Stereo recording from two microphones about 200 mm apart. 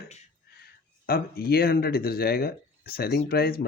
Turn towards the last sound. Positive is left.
turn(degrees=50)  # may be behind; listen again after turning